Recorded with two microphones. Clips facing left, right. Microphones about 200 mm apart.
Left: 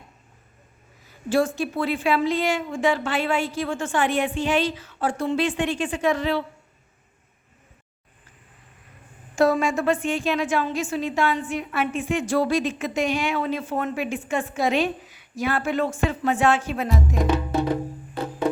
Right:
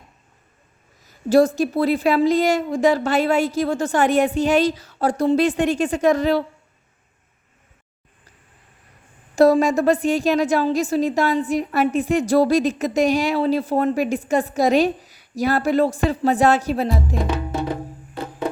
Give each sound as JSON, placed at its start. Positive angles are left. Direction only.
{"t": 1.0, "sound": "a woman's voice", "side_deg": -40}
{"t": 9.3, "sound": "a woman's voice", "side_deg": -35}